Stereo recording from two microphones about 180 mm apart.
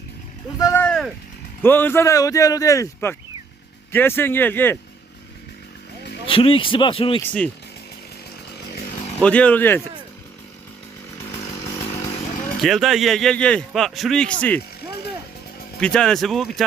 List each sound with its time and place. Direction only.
0.6 s a sound: 10° left (ahead or behind)
1.6 s speech: 10° left (ahead or behind)
6.2 s speech: 30° left (ahead or behind)
7.2 s speech: 5° left (ahead or behind)
9.2 s speech: 5° left (ahead or behind)
11.9 s chainsaw: 20° left (ahead or behind)
12.6 s a man's voice: centre (ahead or behind)
15.8 s a man's voice: 5° left (ahead or behind)